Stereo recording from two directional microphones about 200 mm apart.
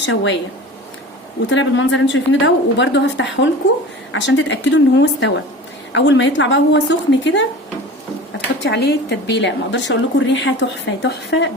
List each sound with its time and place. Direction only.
0.0 s a woman's voice: 65° left (ahead or behind)
1.5 s a woman's voice: 70° left (ahead or behind)
8.6 s a woman's voice: 55° left (ahead or behind)